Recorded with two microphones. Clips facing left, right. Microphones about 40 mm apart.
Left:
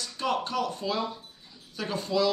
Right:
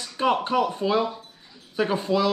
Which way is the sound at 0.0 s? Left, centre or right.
Right.